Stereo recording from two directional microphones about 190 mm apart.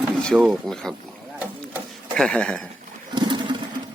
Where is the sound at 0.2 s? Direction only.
5° left (ahead or behind).